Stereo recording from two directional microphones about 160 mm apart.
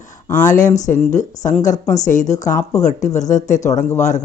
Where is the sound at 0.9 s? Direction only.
50° left (ahead or behind).